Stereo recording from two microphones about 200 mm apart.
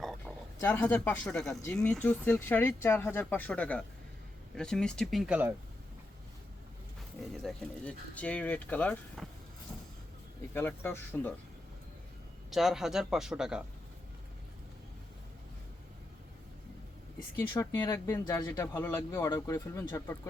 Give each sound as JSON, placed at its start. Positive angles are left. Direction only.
{"t": 0.0, "sound": "a sound", "side_deg": 0}
{"t": 0.6, "sound": "a man's voice", "side_deg": 10}
{"t": 7.4, "sound": "speech", "side_deg": 5}
{"t": 10.5, "sound": "speech", "side_deg": 10}
{"t": 12.5, "sound": "a man's voice", "side_deg": 0}
{"t": 17.5, "sound": "speech", "side_deg": 15}